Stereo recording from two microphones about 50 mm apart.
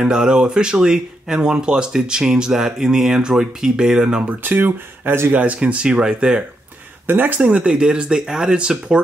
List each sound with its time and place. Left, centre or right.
0.0 s speech: centre
4.3 s speech: right
5.3 s speech: right
7.1 s speech: right
7.4 s speech: right